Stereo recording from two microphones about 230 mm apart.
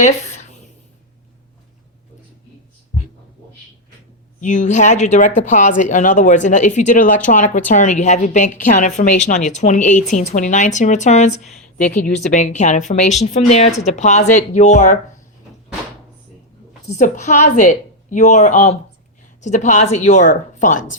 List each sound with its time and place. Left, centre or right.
0.0 s a sound: left
4.4 s a woman's voice: left
16.9 s a woman's voice: left